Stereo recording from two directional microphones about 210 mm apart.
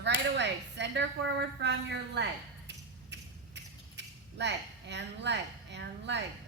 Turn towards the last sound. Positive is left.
turn(degrees=-55)  # may be behind; listen again after turning